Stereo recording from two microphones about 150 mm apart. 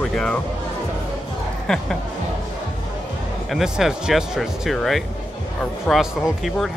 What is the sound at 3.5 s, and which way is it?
Speech, 5° right (ahead or behind).